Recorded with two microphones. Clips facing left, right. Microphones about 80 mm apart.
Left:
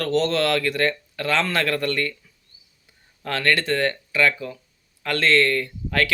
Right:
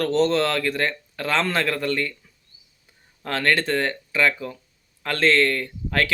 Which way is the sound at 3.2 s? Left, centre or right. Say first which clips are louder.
Even; right.